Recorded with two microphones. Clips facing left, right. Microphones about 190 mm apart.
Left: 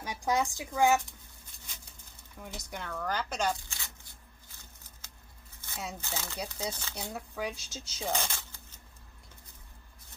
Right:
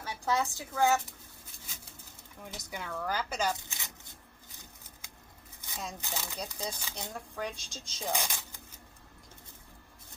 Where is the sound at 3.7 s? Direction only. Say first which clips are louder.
Right 1 dB; 20° right (ahead or behind).